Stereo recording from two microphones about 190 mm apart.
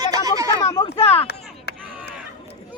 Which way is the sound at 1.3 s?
60° left (ahead or behind).